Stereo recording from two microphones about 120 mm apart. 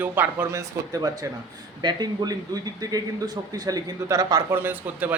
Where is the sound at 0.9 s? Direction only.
30° right (ahead or behind).